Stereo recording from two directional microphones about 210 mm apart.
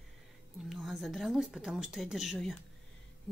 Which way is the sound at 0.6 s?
Centre (ahead or behind).